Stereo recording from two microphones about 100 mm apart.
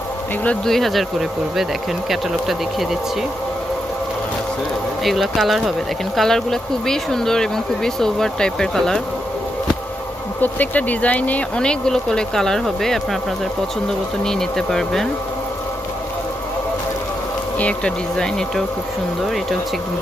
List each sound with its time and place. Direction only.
0.4 s speech: 5° left (ahead or behind)
5.0 s speech: centre (ahead or behind)
10.4 s speech: 15° left (ahead or behind)
14.3 s speech: 5° left (ahead or behind)
17.6 s speech: 10° left (ahead or behind)